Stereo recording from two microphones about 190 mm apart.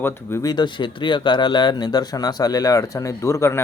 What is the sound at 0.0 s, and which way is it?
Speech, 15° left (ahead or behind).